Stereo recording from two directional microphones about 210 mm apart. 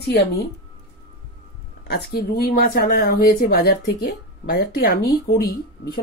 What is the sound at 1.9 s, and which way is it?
Speech, 50° left (ahead or behind).